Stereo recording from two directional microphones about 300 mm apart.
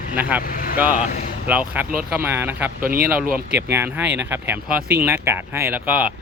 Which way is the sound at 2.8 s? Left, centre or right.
Right.